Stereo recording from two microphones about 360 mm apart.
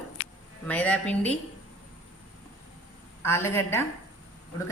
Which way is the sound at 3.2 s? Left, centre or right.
Centre.